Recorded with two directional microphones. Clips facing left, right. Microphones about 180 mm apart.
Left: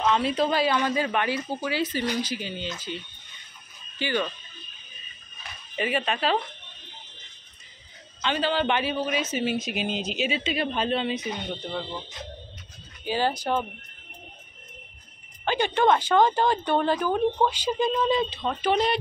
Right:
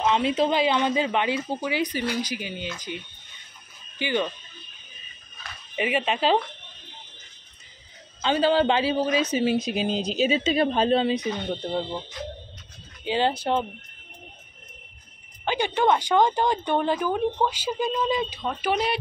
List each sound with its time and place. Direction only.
0.0 s speech: 20° right (ahead or behind)
4.0 s speech: 15° right (ahead or behind)
5.8 s speech: 20° right (ahead or behind)
8.9 s speech: 35° right (ahead or behind)
13.0 s speech: 25° right (ahead or behind)
15.4 s speech: 10° right (ahead or behind)